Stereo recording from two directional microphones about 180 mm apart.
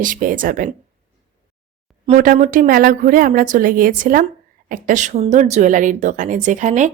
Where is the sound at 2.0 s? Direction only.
45° right (ahead or behind).